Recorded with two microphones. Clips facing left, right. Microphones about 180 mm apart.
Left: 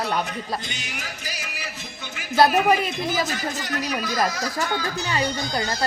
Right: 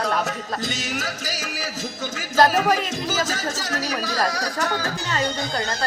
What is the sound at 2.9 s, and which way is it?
Speech, 90° right.